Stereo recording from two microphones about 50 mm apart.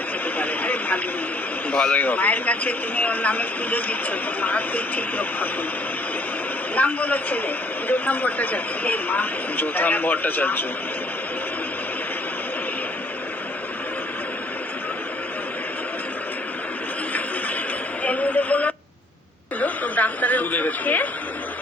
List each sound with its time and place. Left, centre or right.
0.3 s vehicle: left
1.7 s speech: left
2.0 s a man's voice: left
6.7 s a man's voice: left
18.0 s a woman's voice: left
19.5 s chuckle: left